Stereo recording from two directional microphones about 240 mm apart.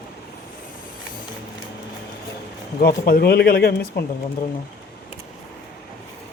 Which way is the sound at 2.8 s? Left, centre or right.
Left.